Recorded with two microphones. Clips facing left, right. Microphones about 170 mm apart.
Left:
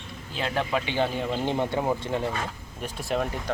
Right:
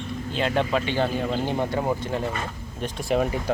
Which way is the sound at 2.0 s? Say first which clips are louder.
Right 1 dB; 20° left (ahead or behind).